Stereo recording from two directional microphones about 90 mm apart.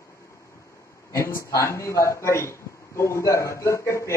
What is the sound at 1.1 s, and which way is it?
A man's voice, 35° left (ahead or behind).